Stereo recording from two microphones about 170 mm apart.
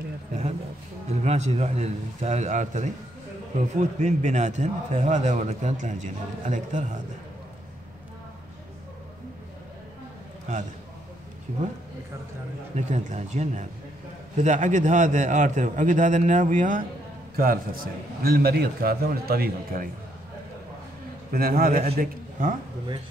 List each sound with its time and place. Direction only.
0.3 s a sound: 40° right (ahead or behind)
1.0 s a man's voice: 40° right (ahead or behind)
12.7 s a man's voice: 40° right (ahead or behind)
17.4 s a man's voice: 60° right (ahead or behind)
21.3 s a man's voice: 60° right (ahead or behind)